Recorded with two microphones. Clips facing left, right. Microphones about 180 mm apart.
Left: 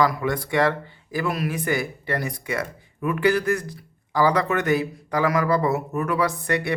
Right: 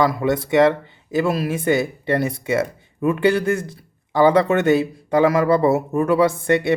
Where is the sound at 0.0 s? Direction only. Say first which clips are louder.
Right 3 dB; 25° right (ahead or behind).